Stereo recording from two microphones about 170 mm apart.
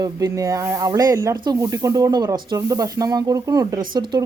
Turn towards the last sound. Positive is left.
turn(degrees=-25)  # may be behind; listen again after turning